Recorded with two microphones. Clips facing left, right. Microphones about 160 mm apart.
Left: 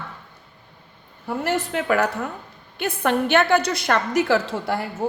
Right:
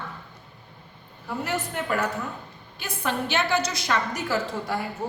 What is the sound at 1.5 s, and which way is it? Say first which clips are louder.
Speech: left 6 dB; 75° left (ahead or behind).